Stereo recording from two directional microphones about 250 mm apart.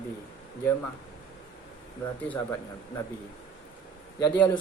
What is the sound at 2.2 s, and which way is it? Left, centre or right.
Speech, centre.